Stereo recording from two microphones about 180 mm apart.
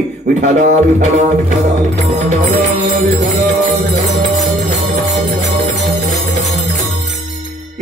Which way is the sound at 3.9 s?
45° right (ahead or behind).